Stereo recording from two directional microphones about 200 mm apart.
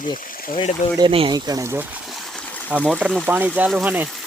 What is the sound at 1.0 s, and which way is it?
Speech, 25° right (ahead or behind).